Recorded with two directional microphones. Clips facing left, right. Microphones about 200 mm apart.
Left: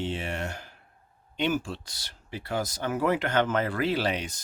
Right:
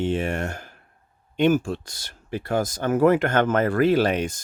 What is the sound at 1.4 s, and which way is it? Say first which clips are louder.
Speech: right 8 dB; 45° right (ahead or behind).